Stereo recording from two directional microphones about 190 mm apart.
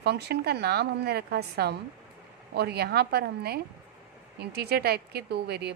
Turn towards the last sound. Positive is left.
turn(degrees=-60)  # may be behind; listen again after turning